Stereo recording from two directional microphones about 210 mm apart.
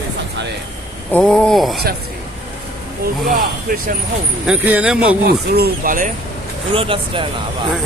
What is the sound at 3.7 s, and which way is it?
Speech, 40° right (ahead or behind).